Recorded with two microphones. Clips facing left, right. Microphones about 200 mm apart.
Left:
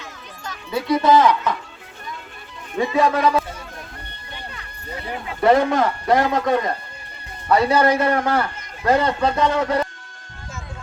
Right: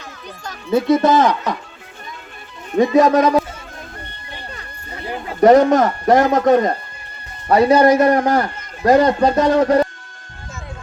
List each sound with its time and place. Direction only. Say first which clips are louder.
0.0 s speech: right 3 dB; 40° right (ahead or behind)
2.7 s a man's voice: right 6 dB; 40° right (ahead or behind)
5.2 s a man's voice: right 6 dB; 40° right (ahead or behind)